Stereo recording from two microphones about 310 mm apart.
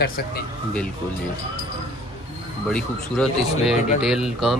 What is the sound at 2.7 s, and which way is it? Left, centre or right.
Speech, centre.